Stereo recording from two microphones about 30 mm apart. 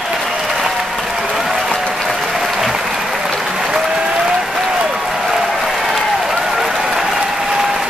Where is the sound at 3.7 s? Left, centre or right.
Centre.